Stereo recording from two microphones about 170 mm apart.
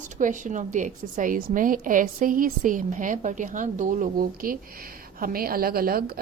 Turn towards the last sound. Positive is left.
turn(degrees=-60)  # may be behind; listen again after turning